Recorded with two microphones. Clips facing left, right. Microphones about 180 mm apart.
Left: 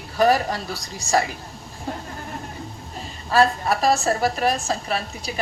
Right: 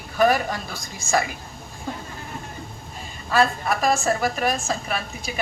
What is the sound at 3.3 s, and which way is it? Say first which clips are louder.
A woman's voice: left 2 dB; 35° left (ahead or behind).